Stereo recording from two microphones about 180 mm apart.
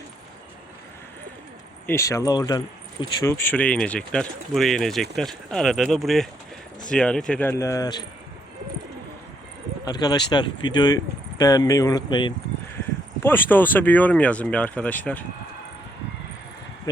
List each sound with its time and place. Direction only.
1.9 s speech: 15° left (ahead or behind)
3.3 s speech: 10° left (ahead or behind)
9.8 s speech: 20° left (ahead or behind)
13.2 s speech: 10° left (ahead or behind)